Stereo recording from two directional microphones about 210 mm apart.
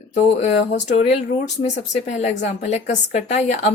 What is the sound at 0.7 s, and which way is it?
Speech, 55° left (ahead or behind).